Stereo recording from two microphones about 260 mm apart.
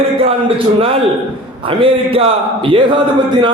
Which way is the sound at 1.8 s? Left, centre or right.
Right.